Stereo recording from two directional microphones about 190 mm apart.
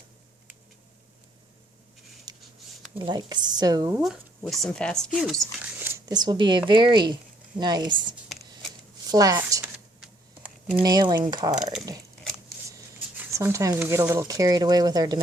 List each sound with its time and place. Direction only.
2.3 s a sound: 20° right (ahead or behind)
3.0 s speech: 20° right (ahead or behind)
3.9 s speech: centre (ahead or behind)
5.8 s speech: 20° right (ahead or behind)
9.0 s speech: 20° right (ahead or behind)
9.7 s a sound: 5° right (ahead or behind)
10.8 s speech: 20° right (ahead or behind)
11.5 s speech: centre (ahead or behind)
13.1 s speech: 15° right (ahead or behind)